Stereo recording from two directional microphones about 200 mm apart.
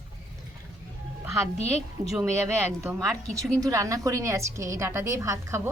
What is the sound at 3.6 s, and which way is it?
A woman's voice, 15° right (ahead or behind).